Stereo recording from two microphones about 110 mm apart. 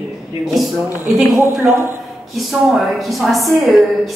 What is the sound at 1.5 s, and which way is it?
Speech, 25° right (ahead or behind).